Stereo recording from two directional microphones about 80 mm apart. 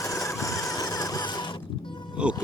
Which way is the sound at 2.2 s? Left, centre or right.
Centre.